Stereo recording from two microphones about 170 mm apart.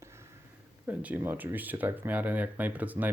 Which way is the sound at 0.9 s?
10° right (ahead or behind).